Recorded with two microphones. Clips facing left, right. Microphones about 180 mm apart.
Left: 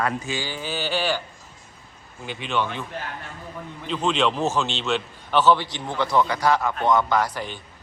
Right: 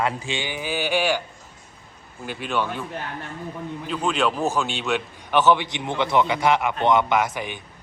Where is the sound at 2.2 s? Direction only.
10° right (ahead or behind).